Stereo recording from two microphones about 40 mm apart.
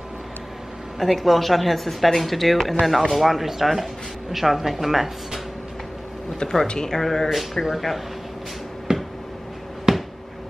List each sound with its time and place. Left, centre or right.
0.9 s speech: centre
6.7 s speech: centre
7.2 s speech: centre
8.9 s a sound: right